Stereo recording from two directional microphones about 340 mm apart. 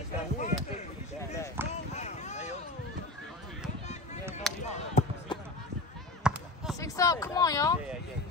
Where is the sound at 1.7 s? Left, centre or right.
Centre.